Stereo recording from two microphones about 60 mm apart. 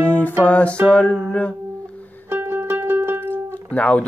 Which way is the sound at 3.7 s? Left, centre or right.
Left.